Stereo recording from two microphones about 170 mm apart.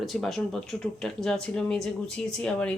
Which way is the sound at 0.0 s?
Centre (ahead or behind).